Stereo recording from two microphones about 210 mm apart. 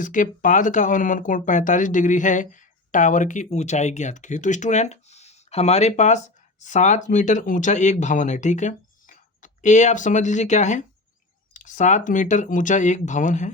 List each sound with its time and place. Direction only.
0.0 s speech: 40° left (ahead or behind)